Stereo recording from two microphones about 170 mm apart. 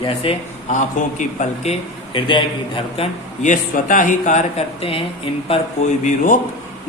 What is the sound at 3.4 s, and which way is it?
Speech, 50° left (ahead or behind).